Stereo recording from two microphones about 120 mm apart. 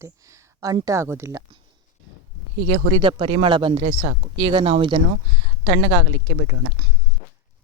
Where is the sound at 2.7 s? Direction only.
45° right (ahead or behind).